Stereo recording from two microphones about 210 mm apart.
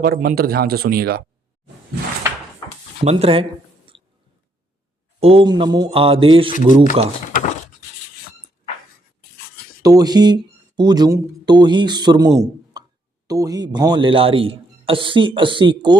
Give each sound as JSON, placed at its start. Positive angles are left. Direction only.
{"t": 0.0, "sound": "speech", "side_deg": -45}
{"t": 3.0, "sound": "a man's voice", "side_deg": -30}
{"t": 3.9, "sound": "chewing", "side_deg": -25}
{"t": 5.2, "sound": "a man's voice", "side_deg": -25}
{"t": 9.8, "sound": "a man's voice", "side_deg": -15}